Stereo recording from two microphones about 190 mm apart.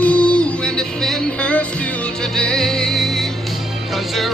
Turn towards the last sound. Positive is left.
turn(degrees=0)  # may be behind; listen again after turning